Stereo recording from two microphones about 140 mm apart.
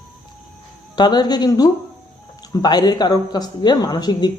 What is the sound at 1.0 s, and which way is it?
Speech, 30° left (ahead or behind).